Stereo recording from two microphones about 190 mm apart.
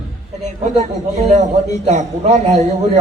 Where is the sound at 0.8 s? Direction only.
35° right (ahead or behind).